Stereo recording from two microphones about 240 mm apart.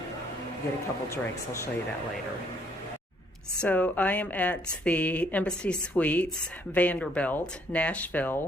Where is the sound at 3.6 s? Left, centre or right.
Centre.